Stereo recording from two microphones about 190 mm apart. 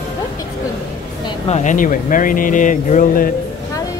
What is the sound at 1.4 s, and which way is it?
Speech, 40° left (ahead or behind).